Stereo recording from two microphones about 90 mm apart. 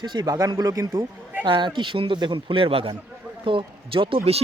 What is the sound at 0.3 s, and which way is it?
Speech, 40° right (ahead or behind).